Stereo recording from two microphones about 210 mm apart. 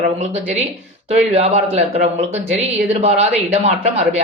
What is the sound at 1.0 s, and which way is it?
Speech, 30° right (ahead or behind).